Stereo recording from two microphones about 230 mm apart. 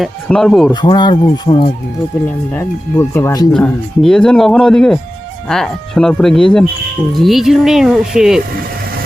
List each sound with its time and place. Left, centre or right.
0.0 s speech: centre
0.7 s speech: centre
2.5 s speech: centre